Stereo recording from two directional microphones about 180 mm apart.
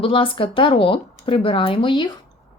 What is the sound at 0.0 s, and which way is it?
A woman's voice, 30° left (ahead or behind).